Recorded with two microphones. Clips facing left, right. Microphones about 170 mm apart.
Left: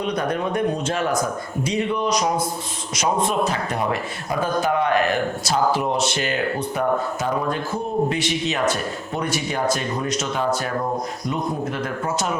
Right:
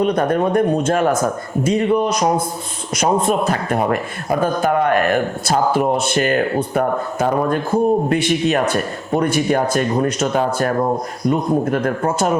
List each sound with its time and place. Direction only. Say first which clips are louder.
0.0 s speech: right 7 dB; 50° right (ahead or behind)